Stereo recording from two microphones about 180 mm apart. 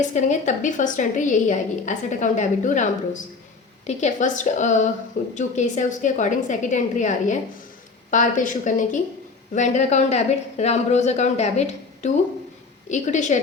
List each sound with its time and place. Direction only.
0.1 s a woman's voice: 40° left (ahead or behind)